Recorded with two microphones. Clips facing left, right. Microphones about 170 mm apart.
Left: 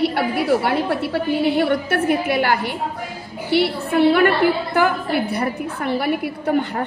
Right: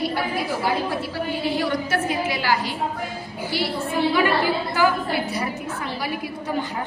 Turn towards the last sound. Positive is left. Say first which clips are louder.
# left 6 dB
turn(degrees=60)  # may be behind; listen again after turning